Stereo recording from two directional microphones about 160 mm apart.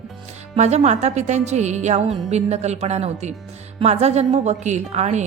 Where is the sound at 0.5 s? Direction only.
45° right (ahead or behind).